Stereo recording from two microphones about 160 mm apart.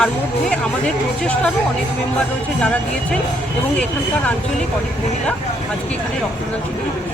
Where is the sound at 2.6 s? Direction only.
5° left (ahead or behind).